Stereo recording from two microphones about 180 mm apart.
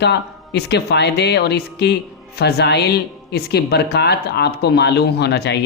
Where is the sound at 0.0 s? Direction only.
70° left (ahead or behind).